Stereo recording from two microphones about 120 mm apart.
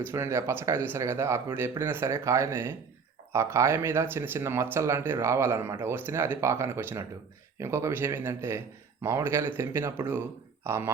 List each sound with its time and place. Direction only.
0.1 s speech: 20° right (ahead or behind)